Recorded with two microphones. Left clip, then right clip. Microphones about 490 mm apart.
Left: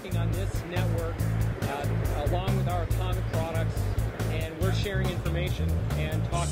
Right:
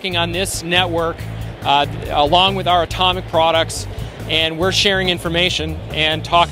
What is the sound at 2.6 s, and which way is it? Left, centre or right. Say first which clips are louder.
Speech: right 18 dB; right.